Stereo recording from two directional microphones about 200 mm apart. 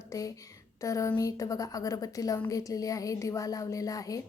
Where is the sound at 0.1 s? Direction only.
15° left (ahead or behind).